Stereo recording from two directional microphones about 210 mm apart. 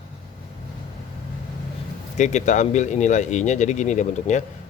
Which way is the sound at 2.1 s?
35° left (ahead or behind).